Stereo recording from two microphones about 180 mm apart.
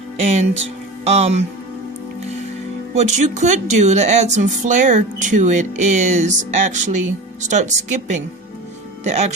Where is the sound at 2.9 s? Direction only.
40° right (ahead or behind).